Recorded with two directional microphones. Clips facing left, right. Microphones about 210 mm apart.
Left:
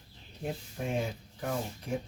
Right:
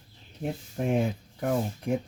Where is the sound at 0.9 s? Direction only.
55° right (ahead or behind).